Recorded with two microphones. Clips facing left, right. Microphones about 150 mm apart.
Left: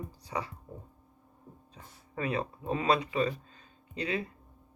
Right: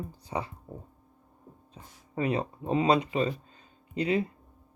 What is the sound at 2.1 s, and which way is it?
Speech, 30° right (ahead or behind).